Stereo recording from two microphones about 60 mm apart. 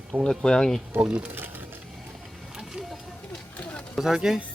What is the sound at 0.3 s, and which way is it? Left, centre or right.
Speech, centre.